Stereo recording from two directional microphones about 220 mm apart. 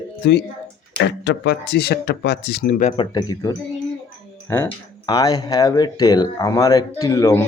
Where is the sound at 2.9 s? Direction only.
20° left (ahead or behind).